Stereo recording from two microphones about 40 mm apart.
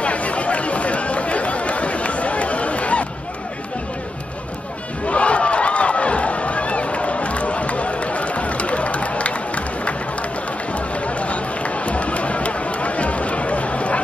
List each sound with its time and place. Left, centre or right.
0.0 s chatter: left
5.0 s a sound: left
10.7 s run: left